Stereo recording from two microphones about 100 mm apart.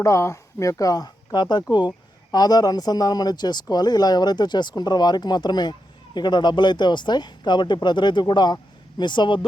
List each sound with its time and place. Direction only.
0.0 s speech: 30° left (ahead or behind); by 9.5 s 50° left (ahead or behind)